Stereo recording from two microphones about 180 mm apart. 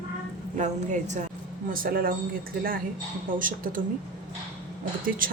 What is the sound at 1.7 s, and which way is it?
Speech, 55° right (ahead or behind).